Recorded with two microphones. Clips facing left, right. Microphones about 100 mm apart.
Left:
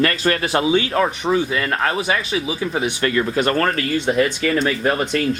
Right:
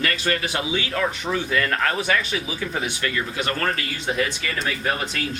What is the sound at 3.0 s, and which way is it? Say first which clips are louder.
Speech: left 8 dB; 45° left (ahead or behind).